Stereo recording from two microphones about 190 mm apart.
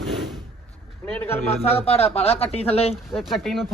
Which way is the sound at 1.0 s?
10° left (ahead or behind).